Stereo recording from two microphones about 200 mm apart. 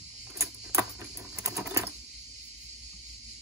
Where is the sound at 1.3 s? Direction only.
15° right (ahead or behind).